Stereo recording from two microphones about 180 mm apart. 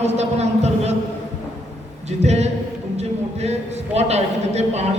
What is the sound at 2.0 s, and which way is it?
A man's voice, 35° right (ahead or behind).